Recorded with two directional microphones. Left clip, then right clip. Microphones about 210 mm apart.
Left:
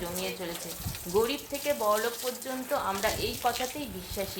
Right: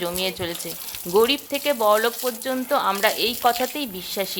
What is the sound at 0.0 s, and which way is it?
Speech, 40° right (ahead or behind).